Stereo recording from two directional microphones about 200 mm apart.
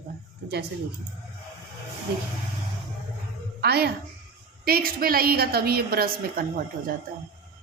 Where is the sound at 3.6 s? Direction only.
55° right (ahead or behind).